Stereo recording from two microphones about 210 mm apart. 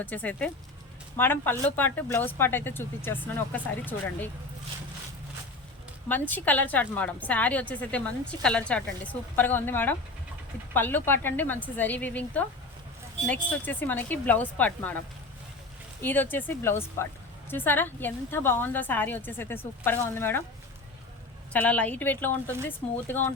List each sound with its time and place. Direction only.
0.0 s speech: 5° left (ahead or behind)
6.1 s speech: 10° left (ahead or behind)
16.0 s speech: 10° left (ahead or behind)
21.5 s speech: 5° left (ahead or behind)